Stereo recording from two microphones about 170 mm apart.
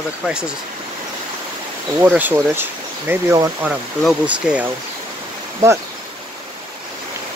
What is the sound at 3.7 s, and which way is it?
Speech, 5° right (ahead or behind).